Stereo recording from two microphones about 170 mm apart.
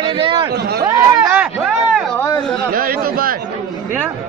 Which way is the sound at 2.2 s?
20° left (ahead or behind).